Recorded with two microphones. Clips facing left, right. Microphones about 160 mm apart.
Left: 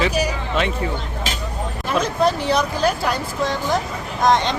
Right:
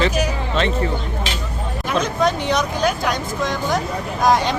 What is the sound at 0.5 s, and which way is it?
Speech, 10° left (ahead or behind).